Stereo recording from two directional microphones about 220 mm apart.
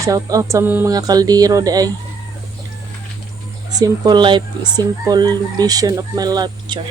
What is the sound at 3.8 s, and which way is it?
Speech, 20° right (ahead or behind).